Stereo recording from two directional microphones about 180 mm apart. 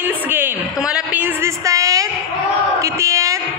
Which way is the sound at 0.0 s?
10° right (ahead or behind).